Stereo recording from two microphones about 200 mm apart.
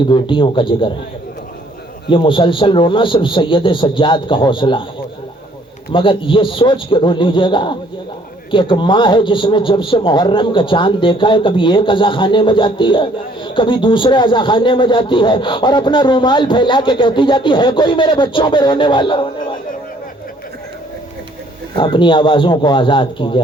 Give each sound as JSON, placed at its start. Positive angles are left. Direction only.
{"t": 0.1, "sound": "a man's voice", "side_deg": 25}
{"t": 2.0, "sound": "a man's voice", "side_deg": 25}
{"t": 5.9, "sound": "a man's voice", "side_deg": 25}
{"t": 21.8, "sound": "a man's voice", "side_deg": 25}